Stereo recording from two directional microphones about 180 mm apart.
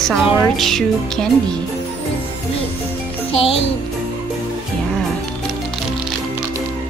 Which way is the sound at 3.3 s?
30° left (ahead or behind).